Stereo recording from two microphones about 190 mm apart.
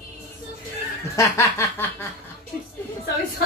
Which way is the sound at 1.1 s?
15° left (ahead or behind).